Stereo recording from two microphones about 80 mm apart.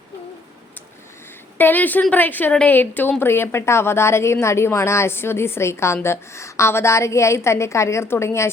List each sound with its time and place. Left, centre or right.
1.5 s a woman's voice: left